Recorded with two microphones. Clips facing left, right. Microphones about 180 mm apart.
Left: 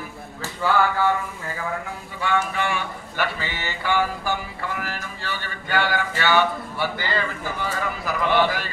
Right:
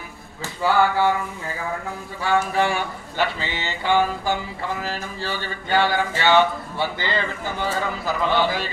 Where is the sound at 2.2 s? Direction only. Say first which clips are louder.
Right 3 dB; 35° right (ahead or behind).